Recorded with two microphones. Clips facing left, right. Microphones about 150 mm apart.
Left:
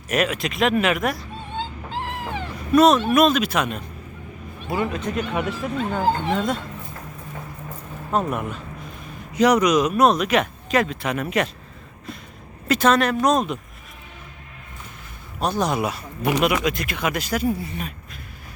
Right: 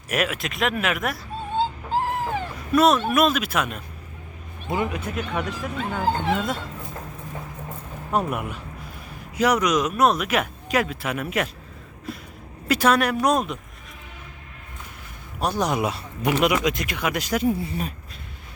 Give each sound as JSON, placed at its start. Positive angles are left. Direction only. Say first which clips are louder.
{"t": 0.1, "sound": "speech", "louder": "left 3 dB", "side_deg": -5}
{"t": 1.5, "sound": "wail", "louder": "right 6 dB", "side_deg": -45}
{"t": 2.7, "sound": "speech", "louder": "left 3 dB", "side_deg": -5}
{"t": 4.7, "sound": "speech", "louder": "left 2 dB", "side_deg": -15}
{"t": 5.3, "sound": "speech", "louder": "left 3 dB", "side_deg": 5}
{"t": 8.3, "sound": "speech", "louder": "left 2 dB", "side_deg": -10}
{"t": 15.4, "sound": "speech", "louder": "left 1 dB", "side_deg": -10}